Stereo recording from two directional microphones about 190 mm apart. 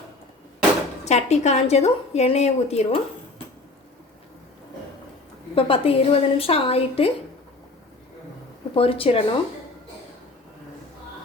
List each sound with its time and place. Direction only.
1.0 s a woman's voice: 35° left (ahead or behind)
5.5 s a woman's voice: 30° left (ahead or behind)
8.7 s speech: 30° left (ahead or behind)